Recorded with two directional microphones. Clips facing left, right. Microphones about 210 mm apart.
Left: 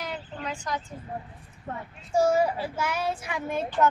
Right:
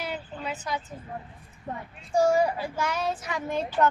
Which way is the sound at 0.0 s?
10° right (ahead or behind).